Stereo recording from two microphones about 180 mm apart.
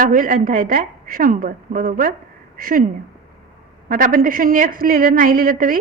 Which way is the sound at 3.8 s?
50° right (ahead or behind).